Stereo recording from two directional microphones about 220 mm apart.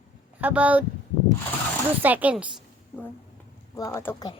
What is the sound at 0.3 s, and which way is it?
Speech, 5° right (ahead or behind).